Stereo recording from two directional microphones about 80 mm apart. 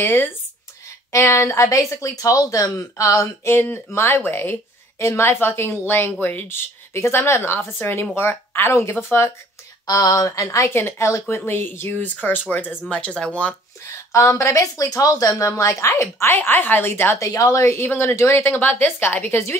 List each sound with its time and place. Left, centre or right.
0.0 s a woman's voice: left
1.1 s speech: left
3.5 s a woman's voice: left
9.8 s speech: left
10.7 s a woman's voice: left
13.8 s a woman's voice: left
16.3 s a woman's voice: left
17.2 s a woman's voice: left